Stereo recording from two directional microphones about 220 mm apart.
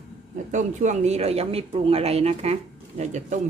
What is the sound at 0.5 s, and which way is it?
Speech, 35° right (ahead or behind).